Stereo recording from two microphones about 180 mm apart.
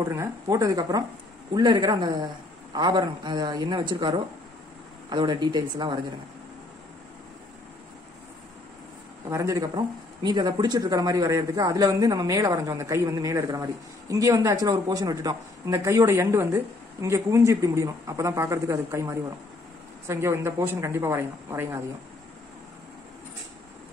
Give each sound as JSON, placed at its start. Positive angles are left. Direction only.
{"t": 0.0, "sound": "a man's voice", "side_deg": -15}
{"t": 9.3, "sound": "a man's voice", "side_deg": -20}